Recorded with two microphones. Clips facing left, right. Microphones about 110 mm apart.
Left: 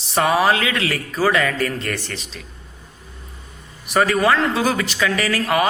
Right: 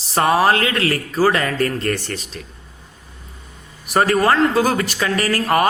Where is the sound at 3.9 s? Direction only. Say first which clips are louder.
Right 1 dB; 40° right (ahead or behind).